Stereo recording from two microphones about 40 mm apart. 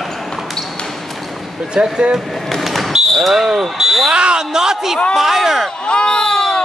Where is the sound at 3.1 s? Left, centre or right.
Centre.